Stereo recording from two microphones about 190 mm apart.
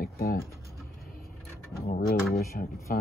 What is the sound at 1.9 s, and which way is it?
Speech, 50° left (ahead or behind).